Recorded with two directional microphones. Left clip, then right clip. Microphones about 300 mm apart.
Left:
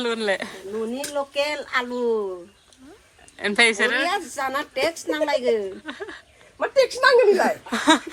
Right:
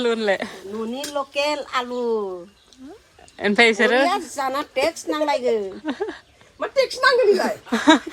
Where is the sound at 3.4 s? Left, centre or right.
Centre.